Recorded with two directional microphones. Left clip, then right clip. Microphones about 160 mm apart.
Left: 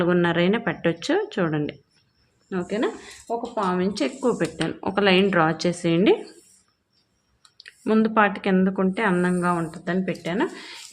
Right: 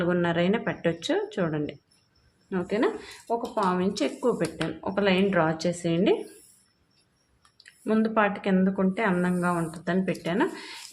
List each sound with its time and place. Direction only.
0.0 s speech: 25° left (ahead or behind)
2.5 s speech: 5° left (ahead or behind)
3.6 s speech: 15° left (ahead or behind)
7.6 s speech: 25° left (ahead or behind); by 10.8 s 5° left (ahead or behind)